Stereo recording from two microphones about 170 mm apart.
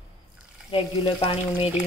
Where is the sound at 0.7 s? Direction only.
35° left (ahead or behind).